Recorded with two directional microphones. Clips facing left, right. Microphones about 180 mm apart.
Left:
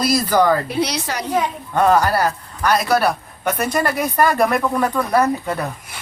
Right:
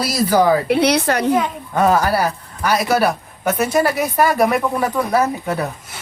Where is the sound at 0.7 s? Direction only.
60° right (ahead or behind).